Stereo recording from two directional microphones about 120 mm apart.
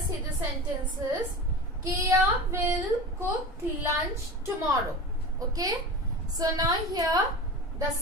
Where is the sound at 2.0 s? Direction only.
25° right (ahead or behind).